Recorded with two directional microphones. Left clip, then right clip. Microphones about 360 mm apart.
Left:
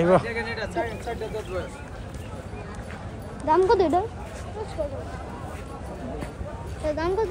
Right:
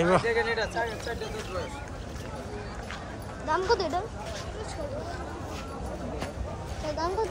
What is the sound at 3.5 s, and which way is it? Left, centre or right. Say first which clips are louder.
Speech: left 7 dB; centre.